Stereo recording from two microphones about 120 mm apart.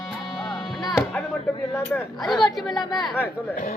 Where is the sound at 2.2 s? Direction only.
Centre (ahead or behind).